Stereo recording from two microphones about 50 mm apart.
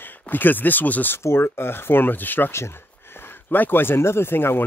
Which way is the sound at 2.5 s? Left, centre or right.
Left.